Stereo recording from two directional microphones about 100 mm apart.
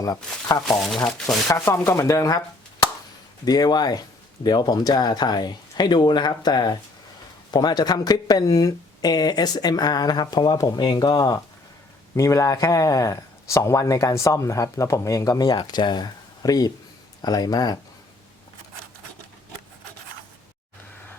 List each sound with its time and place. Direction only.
0.0 s speech: 35° left (ahead or behind)
0.6 s speech: centre (ahead or behind)
1.5 s speech: 30° left (ahead or behind)
3.4 s speech: 40° left (ahead or behind)